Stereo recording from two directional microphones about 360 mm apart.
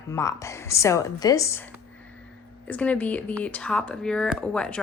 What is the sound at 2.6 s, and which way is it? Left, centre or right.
Speech, centre.